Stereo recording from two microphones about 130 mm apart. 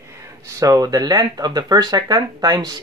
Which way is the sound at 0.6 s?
25° right (ahead or behind).